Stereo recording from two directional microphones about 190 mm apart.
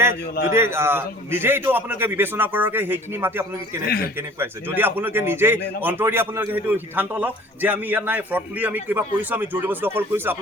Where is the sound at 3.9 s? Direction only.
50° left (ahead or behind).